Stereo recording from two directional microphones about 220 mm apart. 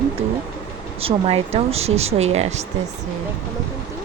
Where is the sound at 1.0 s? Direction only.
25° right (ahead or behind).